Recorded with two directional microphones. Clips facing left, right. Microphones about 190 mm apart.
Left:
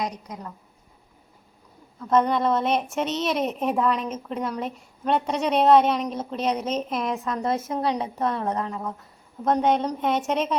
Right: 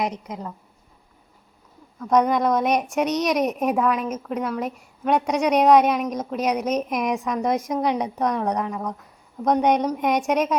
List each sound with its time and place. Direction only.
0.0 s a woman's voice: 25° right (ahead or behind)
2.2 s a woman's voice: 15° right (ahead or behind)